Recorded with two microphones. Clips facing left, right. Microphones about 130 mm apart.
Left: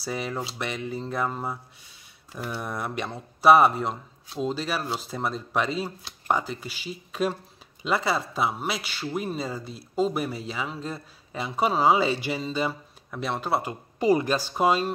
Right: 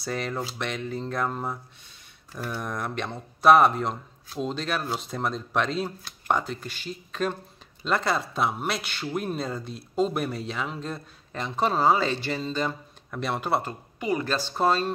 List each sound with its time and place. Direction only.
0.0 s speech: 5° left (ahead or behind)
13.9 s speech: 35° left (ahead or behind)
14.2 s speech: 10° left (ahead or behind)